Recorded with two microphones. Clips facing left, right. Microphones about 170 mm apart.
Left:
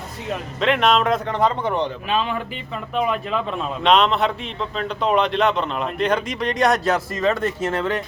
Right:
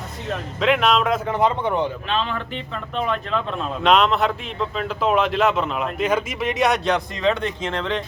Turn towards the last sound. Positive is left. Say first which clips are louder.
# left 2 dB
turn(degrees=5)  # may be behind; listen again after turning